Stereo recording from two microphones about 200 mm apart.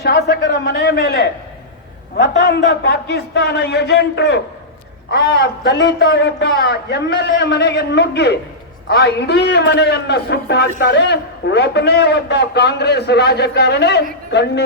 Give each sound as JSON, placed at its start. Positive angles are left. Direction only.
{"t": 0.0, "sound": "a man's voice", "side_deg": 55}